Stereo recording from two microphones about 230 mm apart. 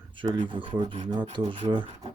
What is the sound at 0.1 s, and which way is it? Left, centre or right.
Filing, right.